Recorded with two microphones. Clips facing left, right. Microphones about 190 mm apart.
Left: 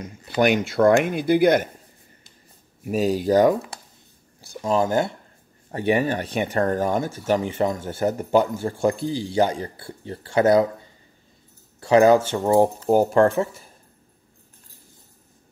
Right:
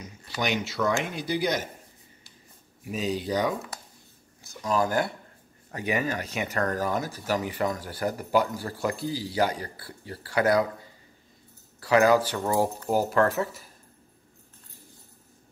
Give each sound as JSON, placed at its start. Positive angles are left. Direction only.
{"t": 0.0, "sound": "speech", "side_deg": 55}
{"t": 2.8, "sound": "speech", "side_deg": 45}
{"t": 4.4, "sound": "speech", "side_deg": 30}
{"t": 11.8, "sound": "speech", "side_deg": 25}